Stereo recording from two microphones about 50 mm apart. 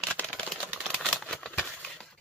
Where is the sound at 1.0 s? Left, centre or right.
Centre.